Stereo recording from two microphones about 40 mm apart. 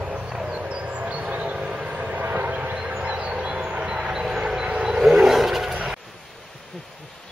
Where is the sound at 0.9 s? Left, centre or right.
Right.